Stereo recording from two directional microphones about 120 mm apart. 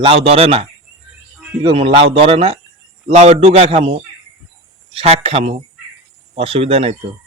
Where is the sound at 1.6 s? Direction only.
50° right (ahead or behind).